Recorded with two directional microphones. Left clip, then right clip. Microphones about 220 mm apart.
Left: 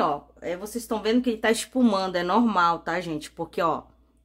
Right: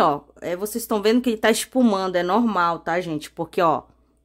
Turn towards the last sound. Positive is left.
turn(degrees=-30)  # may be behind; listen again after turning